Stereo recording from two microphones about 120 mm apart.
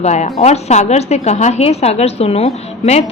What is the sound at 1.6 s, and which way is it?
Speech, 60° left (ahead or behind).